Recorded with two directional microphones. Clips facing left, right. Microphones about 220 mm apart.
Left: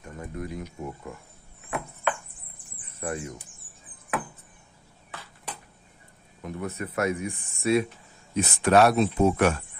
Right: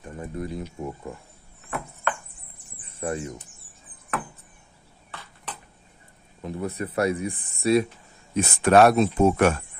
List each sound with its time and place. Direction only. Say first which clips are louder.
0.0 s speech: right 3 dB; 30° right (ahead or behind)
2.9 s speech: right 3 dB; 30° right (ahead or behind)
5.1 s a sound: even; 10° left (ahead or behind)
6.4 s speech: right 3 dB; 30° right (ahead or behind)
8.4 s speech: right 3 dB; 55° right (ahead or behind)